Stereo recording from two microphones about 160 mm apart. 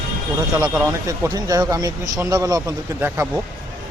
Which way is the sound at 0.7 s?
20° right (ahead or behind).